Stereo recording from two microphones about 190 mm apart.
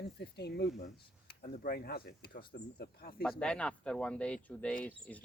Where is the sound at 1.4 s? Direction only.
50° left (ahead or behind).